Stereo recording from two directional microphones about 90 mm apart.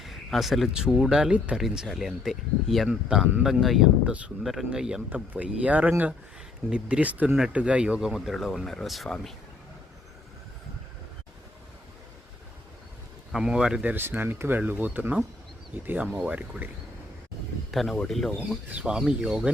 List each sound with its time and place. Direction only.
0.0 s speech: centre (ahead or behind)
1.2 s speech: 10° right (ahead or behind)
13.3 s speech: 5° right (ahead or behind)
13.8 s speech: 20° right (ahead or behind)
17.7 s speech: centre (ahead or behind)
18.3 s speech: 15° right (ahead or behind)